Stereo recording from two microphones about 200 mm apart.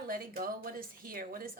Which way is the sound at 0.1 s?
45° right (ahead or behind).